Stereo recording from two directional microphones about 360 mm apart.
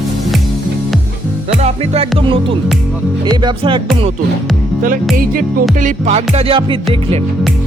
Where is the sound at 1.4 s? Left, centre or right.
Centre.